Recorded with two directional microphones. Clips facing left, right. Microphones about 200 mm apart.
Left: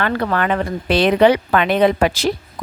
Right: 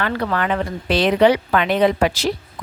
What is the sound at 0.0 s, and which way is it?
Speech, 50° left (ahead or behind).